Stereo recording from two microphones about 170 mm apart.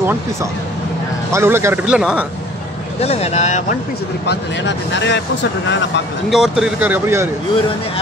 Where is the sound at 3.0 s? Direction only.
40° left (ahead or behind).